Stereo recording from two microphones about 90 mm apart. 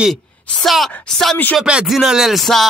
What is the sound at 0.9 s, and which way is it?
Speech, 10° left (ahead or behind).